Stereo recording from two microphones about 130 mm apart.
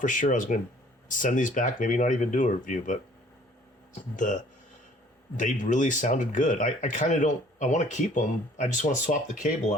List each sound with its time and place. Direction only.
0.0 s speech: 85° left
4.1 s speech: 80° left
5.4 s speech: 75° left (ahead or behind)